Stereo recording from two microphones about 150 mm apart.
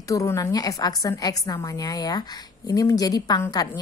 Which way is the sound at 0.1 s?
20° left (ahead or behind).